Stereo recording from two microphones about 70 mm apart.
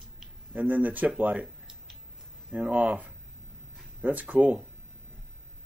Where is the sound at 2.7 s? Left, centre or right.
Right.